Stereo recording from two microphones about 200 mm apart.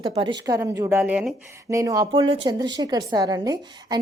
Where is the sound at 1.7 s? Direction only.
15° right (ahead or behind).